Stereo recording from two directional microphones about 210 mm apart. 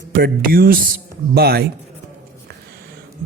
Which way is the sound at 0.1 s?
45° right (ahead or behind).